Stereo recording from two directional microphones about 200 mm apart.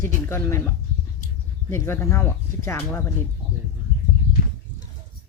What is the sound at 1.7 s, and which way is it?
Speech, 15° left (ahead or behind).